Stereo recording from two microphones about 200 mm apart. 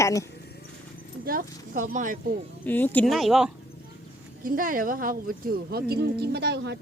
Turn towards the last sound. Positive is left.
turn(degrees=-55)  # may be behind; listen again after turning